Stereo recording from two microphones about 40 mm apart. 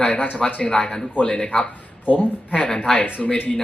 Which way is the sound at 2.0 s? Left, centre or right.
Left.